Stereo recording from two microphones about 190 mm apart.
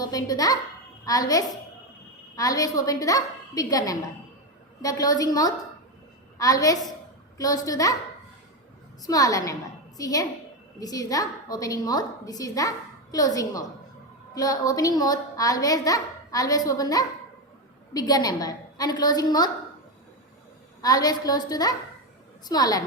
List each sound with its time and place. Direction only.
0.0 s a child's voice: 20° left (ahead or behind)
9.0 s a woman's voice: 20° left (ahead or behind)
20.8 s a woman's voice: 20° left (ahead or behind)